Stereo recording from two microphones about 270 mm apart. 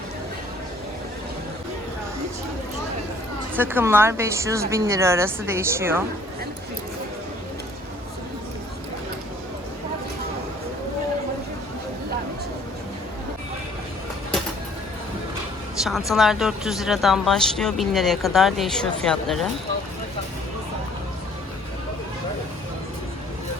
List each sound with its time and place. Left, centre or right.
3.5 s a woman's voice: centre
15.8 s speech: centre